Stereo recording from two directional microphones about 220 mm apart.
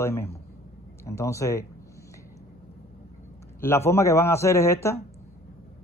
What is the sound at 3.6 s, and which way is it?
Speech, 10° left (ahead or behind).